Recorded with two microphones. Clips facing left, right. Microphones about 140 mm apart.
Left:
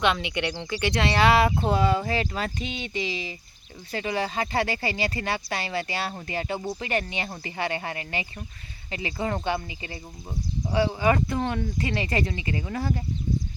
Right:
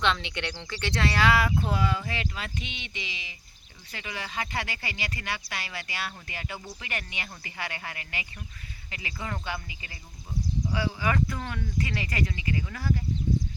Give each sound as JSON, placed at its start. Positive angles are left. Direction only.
{"t": 0.0, "sound": "speech", "side_deg": 10}